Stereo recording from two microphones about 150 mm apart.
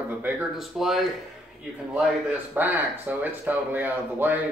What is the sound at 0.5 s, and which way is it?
Speech, centre (ahead or behind).